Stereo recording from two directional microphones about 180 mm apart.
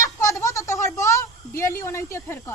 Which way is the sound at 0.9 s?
15° left (ahead or behind).